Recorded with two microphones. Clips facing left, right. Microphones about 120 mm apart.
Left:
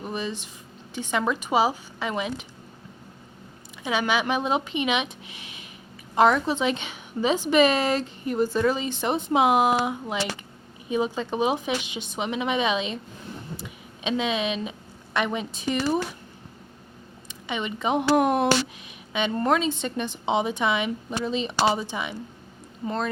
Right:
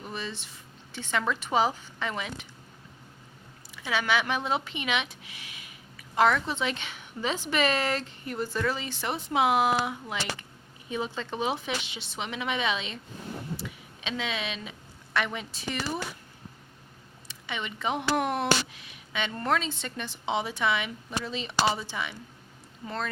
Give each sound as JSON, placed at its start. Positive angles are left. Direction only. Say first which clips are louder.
{"t": 0.0, "sound": "speech", "louder": "left 6 dB", "side_deg": 15}
{"t": 3.8, "sound": "a woman's voice", "louder": "left 3 dB", "side_deg": 20}
{"t": 17.2, "sound": "speech", "louder": "left 6 dB", "side_deg": 20}
{"t": 18.9, "sound": "a sound", "louder": "left 6 dB", "side_deg": 20}
{"t": 19.3, "sound": "a woman's voice", "louder": "left 6 dB", "side_deg": 20}